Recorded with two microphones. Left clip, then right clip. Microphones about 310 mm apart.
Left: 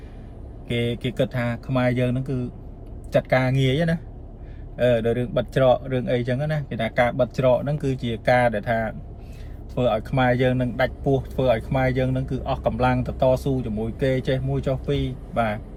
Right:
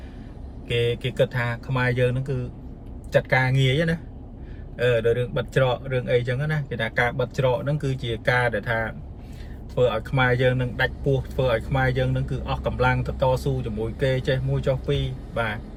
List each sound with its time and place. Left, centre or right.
0.7 s speech: centre